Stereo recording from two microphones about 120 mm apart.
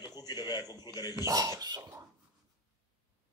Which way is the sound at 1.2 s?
30° right (ahead or behind).